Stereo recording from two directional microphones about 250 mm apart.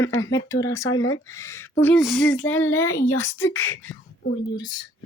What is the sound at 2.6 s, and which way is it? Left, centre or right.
Speech, left.